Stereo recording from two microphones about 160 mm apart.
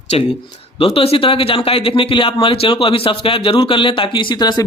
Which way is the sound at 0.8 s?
35° left (ahead or behind).